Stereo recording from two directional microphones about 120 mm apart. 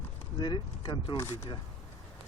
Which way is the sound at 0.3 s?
40° left (ahead or behind).